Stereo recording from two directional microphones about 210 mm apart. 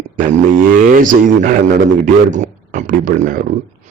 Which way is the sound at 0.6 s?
40° right (ahead or behind).